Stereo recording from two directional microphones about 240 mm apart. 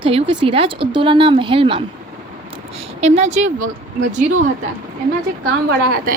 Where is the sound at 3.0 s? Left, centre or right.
Right.